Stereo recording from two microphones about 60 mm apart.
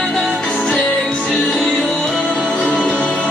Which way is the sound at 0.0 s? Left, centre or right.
Centre.